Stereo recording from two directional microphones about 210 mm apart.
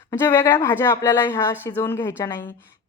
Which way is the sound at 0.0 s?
10° left (ahead or behind).